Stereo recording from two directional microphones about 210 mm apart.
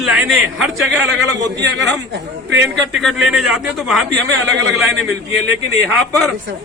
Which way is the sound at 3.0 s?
Centre (ahead or behind).